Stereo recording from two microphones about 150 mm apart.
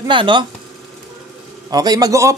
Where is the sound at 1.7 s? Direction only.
25° right (ahead or behind).